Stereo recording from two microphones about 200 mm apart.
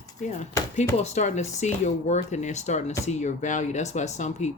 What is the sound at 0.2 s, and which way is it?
Speech, 35° left (ahead or behind).